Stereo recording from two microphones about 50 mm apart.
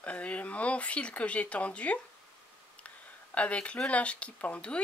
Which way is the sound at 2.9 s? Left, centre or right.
Left.